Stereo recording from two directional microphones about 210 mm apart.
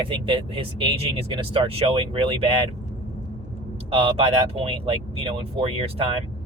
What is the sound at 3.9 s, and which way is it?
Speech, 25° right (ahead or behind).